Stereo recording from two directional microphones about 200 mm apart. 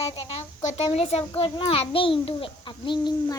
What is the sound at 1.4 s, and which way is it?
A child's voice, 25° left (ahead or behind).